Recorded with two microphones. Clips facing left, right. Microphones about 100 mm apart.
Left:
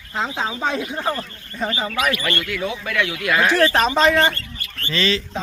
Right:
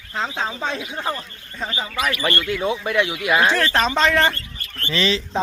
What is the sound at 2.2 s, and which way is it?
Speech, 25° right (ahead or behind).